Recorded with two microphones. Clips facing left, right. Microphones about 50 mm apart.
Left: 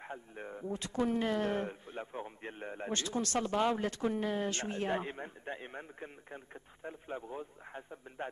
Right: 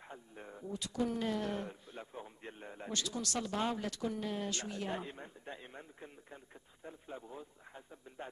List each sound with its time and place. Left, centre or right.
0.0 s speech: left